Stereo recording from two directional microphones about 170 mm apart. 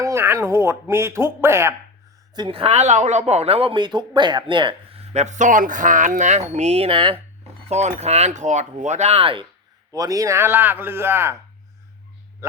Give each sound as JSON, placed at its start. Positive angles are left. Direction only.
{"t": 0.0, "sound": "speech", "side_deg": -15}
{"t": 2.3, "sound": "speech", "side_deg": -30}
{"t": 5.1, "sound": "speech", "side_deg": -45}
{"t": 9.9, "sound": "speech", "side_deg": -20}